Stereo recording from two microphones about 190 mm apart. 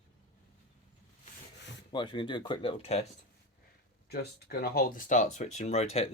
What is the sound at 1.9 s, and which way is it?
Speech, 25° left (ahead or behind).